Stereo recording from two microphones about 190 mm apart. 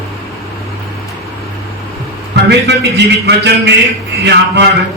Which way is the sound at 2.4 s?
65° right (ahead or behind).